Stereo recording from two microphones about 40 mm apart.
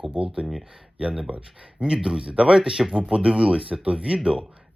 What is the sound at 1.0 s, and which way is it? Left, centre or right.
Speech, right.